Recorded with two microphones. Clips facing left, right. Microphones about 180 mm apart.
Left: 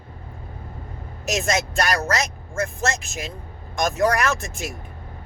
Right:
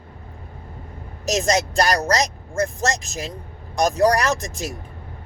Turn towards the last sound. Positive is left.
turn(degrees=-35)  # may be behind; listen again after turning